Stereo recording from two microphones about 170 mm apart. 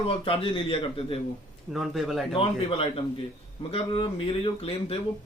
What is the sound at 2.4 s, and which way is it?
A man's voice, 30° left (ahead or behind).